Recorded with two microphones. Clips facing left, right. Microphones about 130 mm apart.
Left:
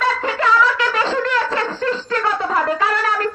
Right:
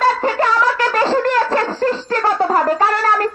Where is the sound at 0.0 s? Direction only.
40° right (ahead or behind).